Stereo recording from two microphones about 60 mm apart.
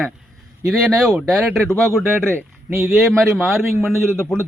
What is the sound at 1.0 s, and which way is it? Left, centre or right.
Speech, centre.